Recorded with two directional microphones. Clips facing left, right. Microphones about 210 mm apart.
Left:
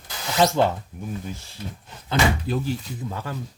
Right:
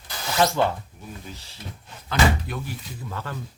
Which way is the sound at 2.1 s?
25° left (ahead or behind).